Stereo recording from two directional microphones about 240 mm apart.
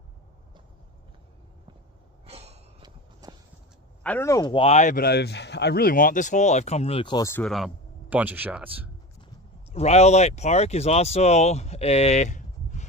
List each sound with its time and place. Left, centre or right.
2.2 s gasp: right
3.2 s walk: centre
4.0 s speech: centre
9.7 s speech: left